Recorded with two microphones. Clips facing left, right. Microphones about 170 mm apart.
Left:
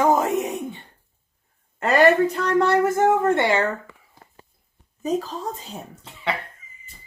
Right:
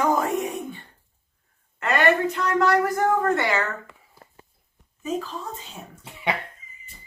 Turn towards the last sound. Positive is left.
turn(degrees=-10)  # may be behind; listen again after turning